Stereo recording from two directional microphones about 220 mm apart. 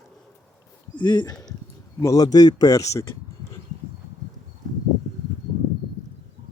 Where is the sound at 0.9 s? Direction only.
20° left (ahead or behind).